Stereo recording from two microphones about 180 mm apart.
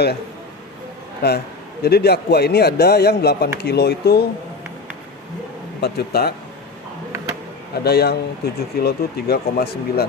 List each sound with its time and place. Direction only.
1.2 s a man's voice: 65° left (ahead or behind)
5.8 s a man's voice: 60° left (ahead or behind)
7.8 s a man's voice: 60° left (ahead or behind)